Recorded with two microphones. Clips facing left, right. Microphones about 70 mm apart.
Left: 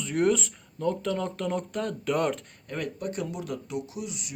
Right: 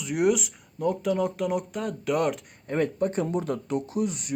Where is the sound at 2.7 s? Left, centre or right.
Right.